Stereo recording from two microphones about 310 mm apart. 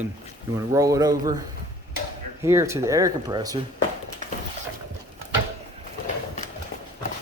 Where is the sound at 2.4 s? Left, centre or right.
Centre.